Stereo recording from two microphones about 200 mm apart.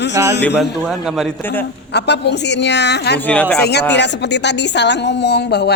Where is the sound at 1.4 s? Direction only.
10° left (ahead or behind).